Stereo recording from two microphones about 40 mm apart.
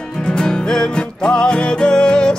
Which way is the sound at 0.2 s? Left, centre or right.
Left.